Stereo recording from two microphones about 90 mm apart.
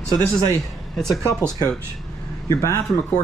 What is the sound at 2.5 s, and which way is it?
Speech, 35° left (ahead or behind).